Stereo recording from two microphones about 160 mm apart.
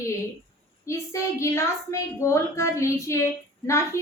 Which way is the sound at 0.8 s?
20° left (ahead or behind).